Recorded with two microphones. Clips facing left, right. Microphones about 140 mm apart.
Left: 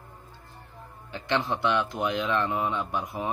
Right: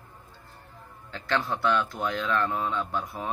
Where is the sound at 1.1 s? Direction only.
20° left (ahead or behind).